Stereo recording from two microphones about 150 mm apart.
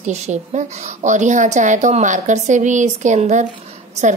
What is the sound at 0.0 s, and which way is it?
A woman's voice, 50° right (ahead or behind).